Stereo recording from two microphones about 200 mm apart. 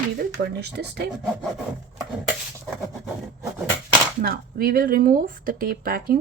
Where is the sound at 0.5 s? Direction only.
55° right (ahead or behind).